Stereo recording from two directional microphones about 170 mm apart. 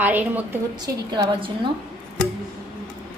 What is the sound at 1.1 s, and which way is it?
Speech, 25° right (ahead or behind).